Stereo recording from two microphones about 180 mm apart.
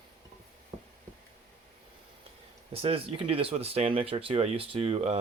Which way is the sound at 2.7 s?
30° right (ahead or behind).